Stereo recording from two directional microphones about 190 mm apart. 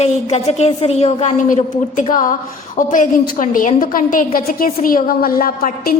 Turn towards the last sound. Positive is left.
turn(degrees=50)  # may be behind; listen again after turning